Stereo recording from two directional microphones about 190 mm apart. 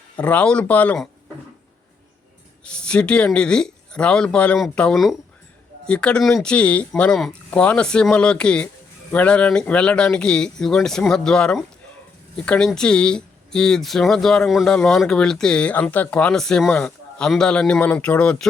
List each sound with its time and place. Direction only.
0.2 s speech: 5° left (ahead or behind)
2.6 s speech: 5° left (ahead or behind)